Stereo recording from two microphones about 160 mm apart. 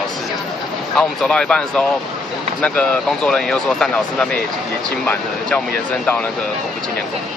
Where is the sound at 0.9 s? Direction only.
5° left (ahead or behind).